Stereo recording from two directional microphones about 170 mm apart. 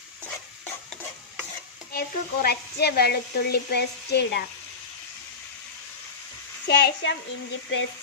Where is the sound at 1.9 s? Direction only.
65° left (ahead or behind).